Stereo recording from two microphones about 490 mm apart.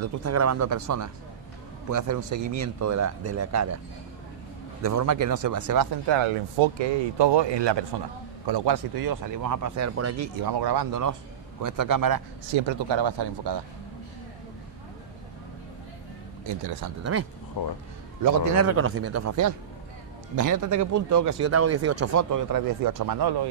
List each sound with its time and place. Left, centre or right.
0.0 s speech: right
4.8 s speech: right
6.0 s speech: right
10.6 s speech: right
12.5 s speech: right
17.6 s speech: left
18.2 s a man's voice: right